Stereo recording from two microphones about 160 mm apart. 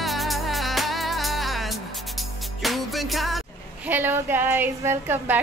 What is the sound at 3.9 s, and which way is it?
A woman's voice, 15° right (ahead or behind).